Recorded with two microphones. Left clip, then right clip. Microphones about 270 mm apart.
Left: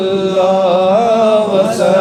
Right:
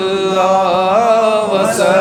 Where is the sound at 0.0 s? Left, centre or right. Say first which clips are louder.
Left 1 dB; right.